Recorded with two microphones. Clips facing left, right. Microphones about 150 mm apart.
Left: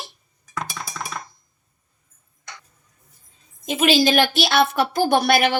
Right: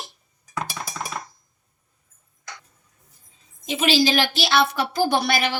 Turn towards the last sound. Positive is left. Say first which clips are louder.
# left 4 dB
turn(degrees=55)  # may be behind; listen again after turning